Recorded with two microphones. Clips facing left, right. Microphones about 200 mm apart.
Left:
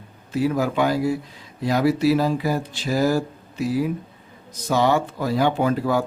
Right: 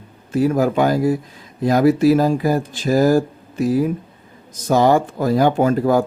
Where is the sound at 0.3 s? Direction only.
45° right (ahead or behind).